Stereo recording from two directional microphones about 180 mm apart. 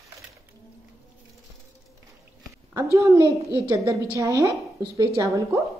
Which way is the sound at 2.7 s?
15° right (ahead or behind).